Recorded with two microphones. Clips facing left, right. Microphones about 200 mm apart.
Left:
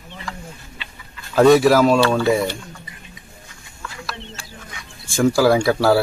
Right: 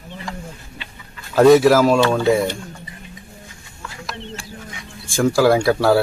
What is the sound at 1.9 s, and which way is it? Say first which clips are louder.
Speech: right 1 dB; 20° right (ahead or behind).